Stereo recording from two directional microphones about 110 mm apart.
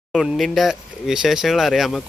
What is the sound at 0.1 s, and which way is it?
Speech, centre (ahead or behind).